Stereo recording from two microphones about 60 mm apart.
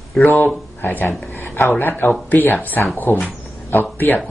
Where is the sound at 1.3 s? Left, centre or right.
Left.